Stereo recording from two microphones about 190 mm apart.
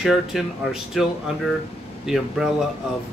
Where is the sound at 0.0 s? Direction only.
Centre (ahead or behind).